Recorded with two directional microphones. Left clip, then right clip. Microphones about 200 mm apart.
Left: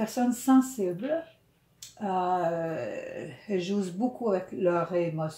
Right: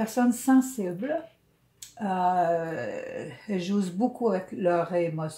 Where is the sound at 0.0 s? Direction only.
30° right (ahead or behind).